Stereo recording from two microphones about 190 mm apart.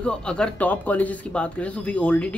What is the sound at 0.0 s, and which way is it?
Speech, 5° left (ahead or behind).